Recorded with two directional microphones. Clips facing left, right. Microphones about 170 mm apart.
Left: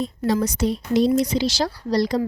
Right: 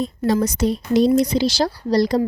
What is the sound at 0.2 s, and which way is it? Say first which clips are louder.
Speech: right 2 dB; 35° right (ahead or behind).